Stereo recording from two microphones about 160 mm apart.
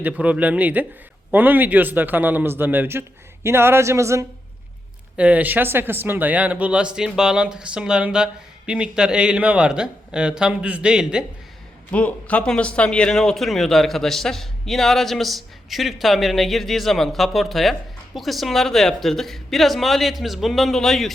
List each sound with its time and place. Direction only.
0.0 s a man's voice: 10° right (ahead or behind)
11.9 s a man's voice: 10° left (ahead or behind)